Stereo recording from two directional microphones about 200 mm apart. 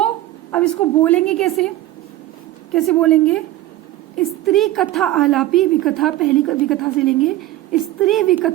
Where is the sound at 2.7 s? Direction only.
Centre (ahead or behind).